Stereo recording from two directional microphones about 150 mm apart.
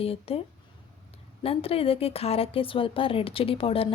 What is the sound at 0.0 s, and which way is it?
Speech, 40° left (ahead or behind).